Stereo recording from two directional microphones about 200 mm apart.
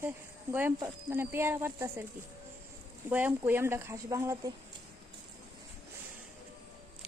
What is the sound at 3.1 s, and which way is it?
Speech, 10° right (ahead or behind).